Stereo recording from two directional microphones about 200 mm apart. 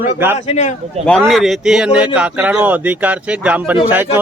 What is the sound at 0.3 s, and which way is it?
Speech, 35° left (ahead or behind).